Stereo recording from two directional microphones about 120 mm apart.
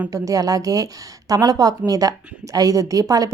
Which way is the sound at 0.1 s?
30° right (ahead or behind).